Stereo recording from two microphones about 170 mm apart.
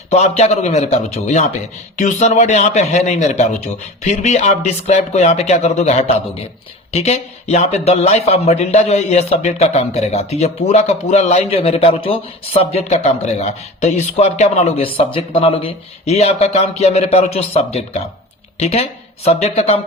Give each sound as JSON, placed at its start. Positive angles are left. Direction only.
{"t": 0.1, "sound": "speech", "side_deg": 40}